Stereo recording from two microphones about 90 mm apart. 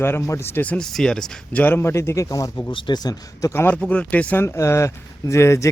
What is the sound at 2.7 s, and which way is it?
Speech, 65° left (ahead or behind).